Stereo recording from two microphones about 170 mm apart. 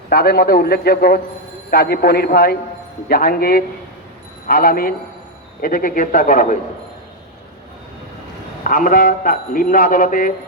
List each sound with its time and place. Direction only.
0.1 s a man's voice: 65° left (ahead or behind)
8.6 s a man's voice: 50° left (ahead or behind)